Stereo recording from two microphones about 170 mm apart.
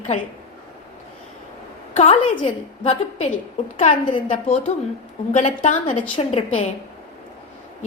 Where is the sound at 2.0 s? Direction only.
35° left (ahead or behind).